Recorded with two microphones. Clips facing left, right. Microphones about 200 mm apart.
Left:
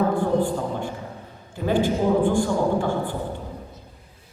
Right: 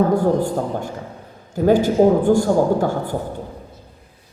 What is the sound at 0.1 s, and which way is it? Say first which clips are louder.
A woman's voice: right 4 dB; 40° right (ahead or behind).